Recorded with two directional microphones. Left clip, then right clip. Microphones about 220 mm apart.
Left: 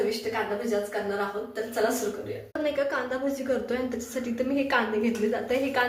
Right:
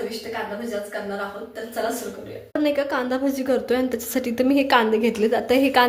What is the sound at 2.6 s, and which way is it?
A woman's voice, 40° right (ahead or behind).